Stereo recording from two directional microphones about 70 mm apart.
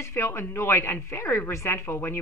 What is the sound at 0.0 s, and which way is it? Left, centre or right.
A woman's voice, left.